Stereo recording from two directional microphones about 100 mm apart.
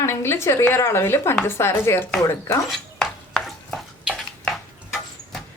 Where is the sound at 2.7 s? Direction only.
5° left (ahead or behind).